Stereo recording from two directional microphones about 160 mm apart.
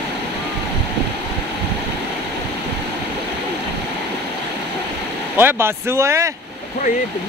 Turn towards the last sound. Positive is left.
turn(degrees=-15)  # may be behind; listen again after turning